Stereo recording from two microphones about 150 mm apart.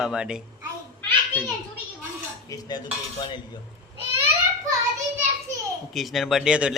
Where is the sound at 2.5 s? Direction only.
30° left (ahead or behind).